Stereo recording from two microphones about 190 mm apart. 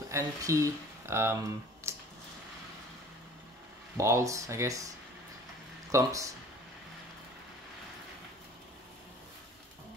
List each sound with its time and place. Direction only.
0.1 s speech: 15° right (ahead or behind)
1.9 s a sound: 15° right (ahead or behind)
3.9 s speech: 15° right (ahead or behind)